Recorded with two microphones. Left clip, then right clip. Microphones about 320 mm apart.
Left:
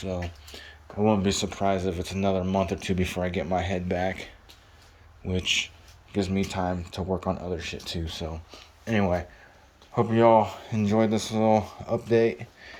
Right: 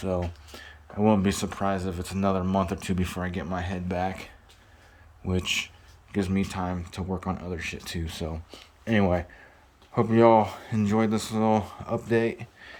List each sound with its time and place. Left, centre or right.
0.0 s speech: centre
5.3 s speech: centre